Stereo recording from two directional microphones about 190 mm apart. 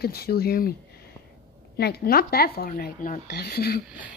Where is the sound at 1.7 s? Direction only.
55° left (ahead or behind).